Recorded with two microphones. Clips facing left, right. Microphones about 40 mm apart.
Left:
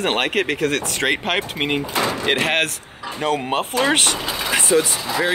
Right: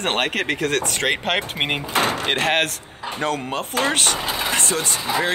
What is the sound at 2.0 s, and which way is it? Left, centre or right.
Door, right.